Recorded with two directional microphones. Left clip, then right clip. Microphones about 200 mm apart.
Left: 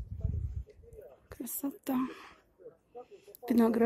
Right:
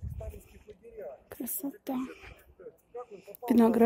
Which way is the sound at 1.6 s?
10° left (ahead or behind).